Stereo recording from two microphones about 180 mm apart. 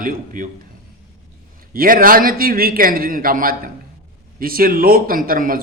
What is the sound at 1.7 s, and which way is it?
A man's voice, 50° right (ahead or behind).